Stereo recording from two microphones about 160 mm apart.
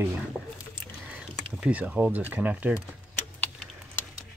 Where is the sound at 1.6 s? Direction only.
5° right (ahead or behind).